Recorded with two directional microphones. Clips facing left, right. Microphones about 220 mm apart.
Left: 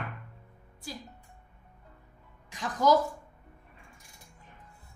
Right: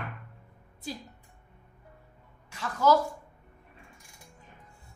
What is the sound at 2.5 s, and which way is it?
Speech, 15° left (ahead or behind).